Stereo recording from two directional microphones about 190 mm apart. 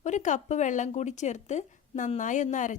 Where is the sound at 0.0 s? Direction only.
40° left (ahead or behind).